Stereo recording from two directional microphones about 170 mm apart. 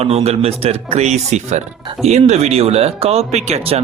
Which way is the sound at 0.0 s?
40° right (ahead or behind).